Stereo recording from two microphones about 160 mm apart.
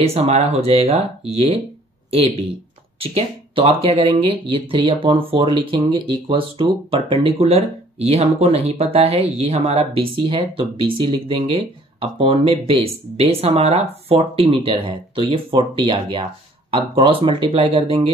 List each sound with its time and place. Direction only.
0.0 s speech: 40° right (ahead or behind)